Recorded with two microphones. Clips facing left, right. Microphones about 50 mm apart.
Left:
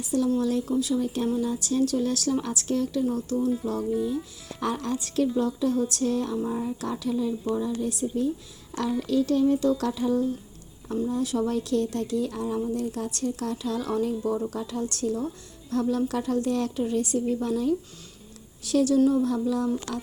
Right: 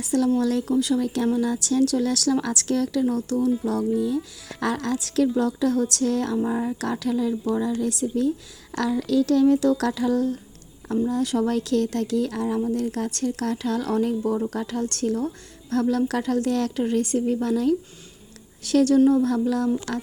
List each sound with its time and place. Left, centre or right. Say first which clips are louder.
0.0 s a woman's voice: right 3 dB; right
0.3 s speech: right 3 dB; right
0.7 s speech: right 3 dB; right
3.7 s speech: right 4 dB; right
6.4 s a woman's voice: right 4 dB; right
10.8 s a woman's voice: right 4 dB; right
18.9 s a woman's voice: right 4 dB; right
19.2 s a woman's voice: right 3 dB; right